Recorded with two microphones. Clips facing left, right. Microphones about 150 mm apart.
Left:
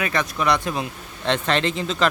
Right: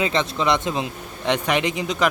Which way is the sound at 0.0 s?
20° right (ahead or behind).